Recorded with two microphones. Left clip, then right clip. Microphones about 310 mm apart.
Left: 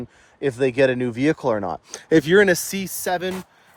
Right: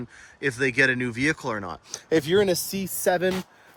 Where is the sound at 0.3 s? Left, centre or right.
Centre.